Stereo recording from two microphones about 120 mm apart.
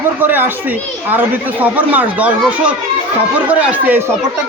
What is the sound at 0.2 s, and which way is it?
A man's voice, 15° right (ahead or behind).